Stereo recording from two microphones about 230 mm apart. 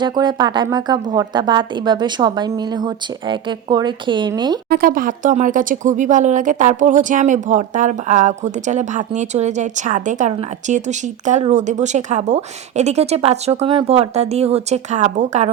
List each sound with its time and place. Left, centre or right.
0.0 s a woman's voice: centre
4.7 s a woman's voice: right